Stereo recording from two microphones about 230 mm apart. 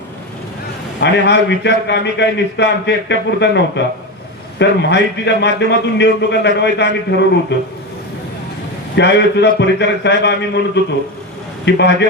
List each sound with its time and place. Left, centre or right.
0.9 s a man's voice: left
9.0 s a man's voice: left
11.6 s a man's voice: left